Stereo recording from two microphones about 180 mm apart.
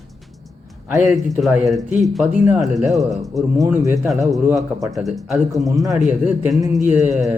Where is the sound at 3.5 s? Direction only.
15° right (ahead or behind).